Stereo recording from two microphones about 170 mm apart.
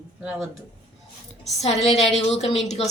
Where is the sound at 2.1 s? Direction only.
40° left (ahead or behind).